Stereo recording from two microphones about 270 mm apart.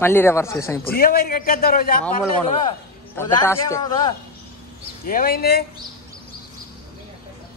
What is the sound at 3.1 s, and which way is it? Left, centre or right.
A man's voice, centre.